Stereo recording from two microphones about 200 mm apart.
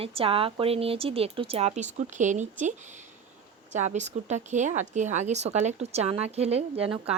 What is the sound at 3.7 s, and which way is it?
A woman's voice, 35° right (ahead or behind).